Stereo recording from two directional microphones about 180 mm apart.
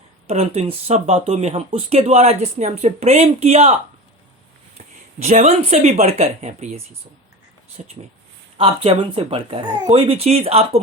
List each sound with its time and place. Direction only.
0.3 s speech: 35° right (ahead or behind)
5.2 s speech: 40° right (ahead or behind)